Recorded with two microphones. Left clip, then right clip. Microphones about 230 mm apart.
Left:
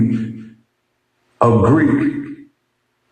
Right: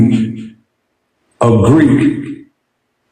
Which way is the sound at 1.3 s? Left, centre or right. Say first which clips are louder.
Right 3 dB; right.